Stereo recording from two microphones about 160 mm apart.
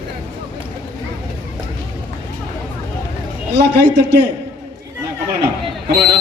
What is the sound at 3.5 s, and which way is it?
Speech, 90° right.